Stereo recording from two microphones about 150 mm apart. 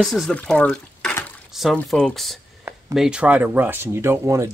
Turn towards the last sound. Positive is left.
turn(degrees=-20)  # may be behind; listen again after turning